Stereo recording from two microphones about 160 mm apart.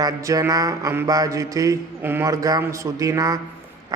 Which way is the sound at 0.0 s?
20° right (ahead or behind).